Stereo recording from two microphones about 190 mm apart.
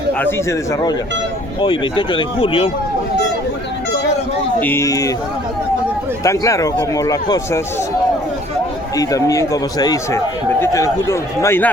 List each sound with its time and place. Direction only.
0.1 s speech: 10° left (ahead or behind); by 2.6 s 25° left (ahead or behind)
4.6 s speech: 15° left (ahead or behind)
6.2 s speech: 15° left (ahead or behind)
9.0 s speech: 20° left (ahead or behind)